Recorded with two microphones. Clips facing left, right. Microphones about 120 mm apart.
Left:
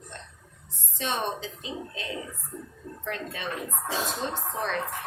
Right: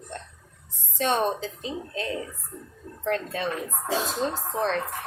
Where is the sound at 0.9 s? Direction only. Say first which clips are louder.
Right 6 dB; 45° right (ahead or behind).